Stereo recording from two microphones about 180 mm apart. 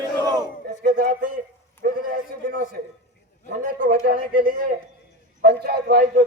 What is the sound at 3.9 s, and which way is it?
A man's voice, 50° right (ahead or behind).